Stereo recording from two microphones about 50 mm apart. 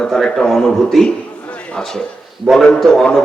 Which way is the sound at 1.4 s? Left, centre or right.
Left.